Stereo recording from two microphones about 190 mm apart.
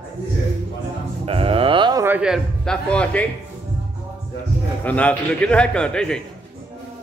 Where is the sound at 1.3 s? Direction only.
30° right (ahead or behind).